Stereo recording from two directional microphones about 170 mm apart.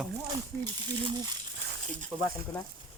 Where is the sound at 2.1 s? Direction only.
15° right (ahead or behind).